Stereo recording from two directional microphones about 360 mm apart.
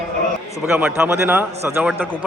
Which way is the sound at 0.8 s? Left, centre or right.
Centre.